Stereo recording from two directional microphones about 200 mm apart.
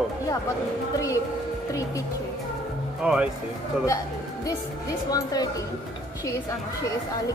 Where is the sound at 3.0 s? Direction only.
5° right (ahead or behind).